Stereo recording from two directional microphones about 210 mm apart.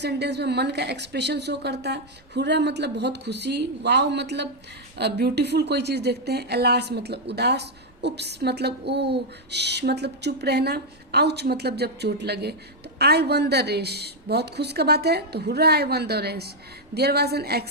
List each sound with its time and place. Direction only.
0.0 s speech: 50° right (ahead or behind)